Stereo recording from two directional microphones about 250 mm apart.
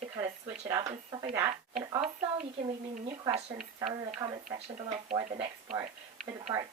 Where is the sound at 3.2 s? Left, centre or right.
Right.